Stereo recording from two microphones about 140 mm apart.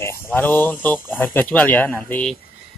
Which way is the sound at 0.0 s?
15° left (ahead or behind).